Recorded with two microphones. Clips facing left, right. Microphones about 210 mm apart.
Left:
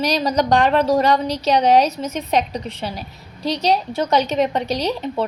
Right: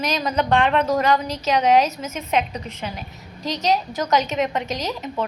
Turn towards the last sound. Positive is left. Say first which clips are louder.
# left 5 dB
turn(degrees=30)  # may be behind; listen again after turning